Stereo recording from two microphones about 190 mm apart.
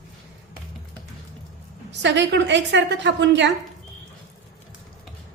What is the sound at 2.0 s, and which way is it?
A woman's voice, 65° right (ahead or behind).